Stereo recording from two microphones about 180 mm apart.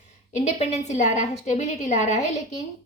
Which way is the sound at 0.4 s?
40° left (ahead or behind).